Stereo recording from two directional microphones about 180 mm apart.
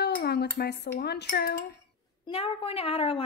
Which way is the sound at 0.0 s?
65° left (ahead or behind).